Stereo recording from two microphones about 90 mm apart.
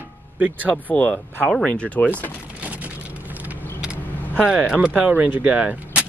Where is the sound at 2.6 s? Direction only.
15° right (ahead or behind).